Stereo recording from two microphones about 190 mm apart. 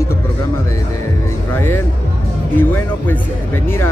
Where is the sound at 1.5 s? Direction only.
10° left (ahead or behind).